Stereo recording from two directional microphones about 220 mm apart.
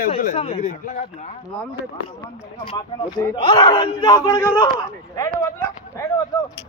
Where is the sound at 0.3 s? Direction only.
20° left (ahead or behind).